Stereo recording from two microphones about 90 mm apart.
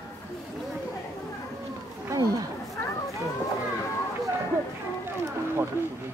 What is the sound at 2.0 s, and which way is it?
Wild animals, 40° right (ahead or behind).